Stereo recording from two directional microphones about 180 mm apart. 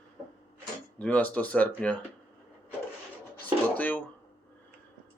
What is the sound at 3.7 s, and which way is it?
Guitar, 10° left (ahead or behind).